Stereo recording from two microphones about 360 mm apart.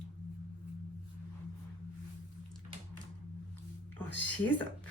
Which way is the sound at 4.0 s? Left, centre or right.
Centre.